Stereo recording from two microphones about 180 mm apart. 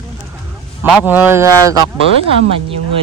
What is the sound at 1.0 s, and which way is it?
Speech, 10° right (ahead or behind).